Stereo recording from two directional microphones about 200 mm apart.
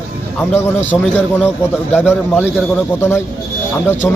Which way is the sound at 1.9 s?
10° left (ahead or behind).